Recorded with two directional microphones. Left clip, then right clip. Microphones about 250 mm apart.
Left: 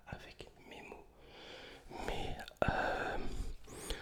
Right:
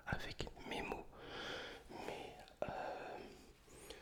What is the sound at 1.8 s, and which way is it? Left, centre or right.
Whispering, centre.